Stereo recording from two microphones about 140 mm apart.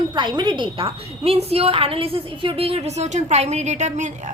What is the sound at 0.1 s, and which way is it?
A woman's voice, 30° right (ahead or behind).